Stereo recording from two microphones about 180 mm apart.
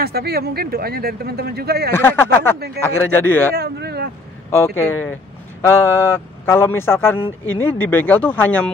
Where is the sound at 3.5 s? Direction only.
65° right (ahead or behind).